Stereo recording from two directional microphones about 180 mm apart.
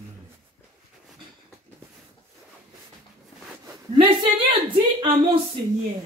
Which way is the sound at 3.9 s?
25° right (ahead or behind).